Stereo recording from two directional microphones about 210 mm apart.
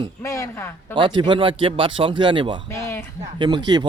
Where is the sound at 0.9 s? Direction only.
25° right (ahead or behind).